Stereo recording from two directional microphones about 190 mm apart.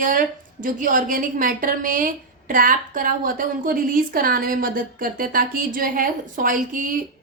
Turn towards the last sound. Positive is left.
turn(degrees=-45)  # may be behind; listen again after turning